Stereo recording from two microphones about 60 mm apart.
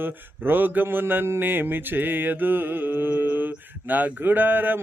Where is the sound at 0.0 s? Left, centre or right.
Right.